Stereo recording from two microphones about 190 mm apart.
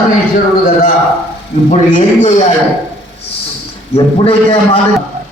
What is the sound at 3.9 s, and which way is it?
Speech, 30° left (ahead or behind).